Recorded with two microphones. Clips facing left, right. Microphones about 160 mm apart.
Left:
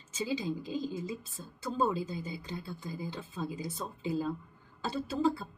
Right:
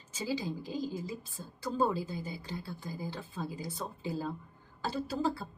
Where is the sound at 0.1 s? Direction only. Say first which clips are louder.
Left 1 dB; 20° left (ahead or behind).